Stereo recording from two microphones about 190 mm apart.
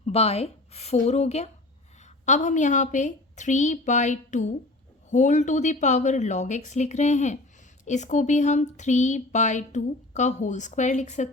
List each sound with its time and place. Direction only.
0.0 s speech: 35° left (ahead or behind)